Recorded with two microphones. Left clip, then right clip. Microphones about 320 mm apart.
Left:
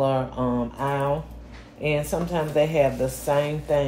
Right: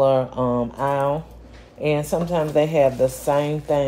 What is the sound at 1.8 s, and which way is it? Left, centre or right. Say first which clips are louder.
Speech: right 3 dB; right.